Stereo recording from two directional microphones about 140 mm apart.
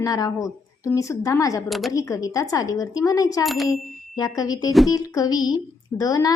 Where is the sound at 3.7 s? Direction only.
25° left (ahead or behind).